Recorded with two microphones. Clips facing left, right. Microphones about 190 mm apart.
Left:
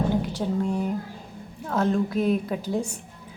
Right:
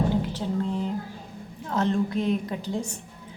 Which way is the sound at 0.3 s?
10° left (ahead or behind).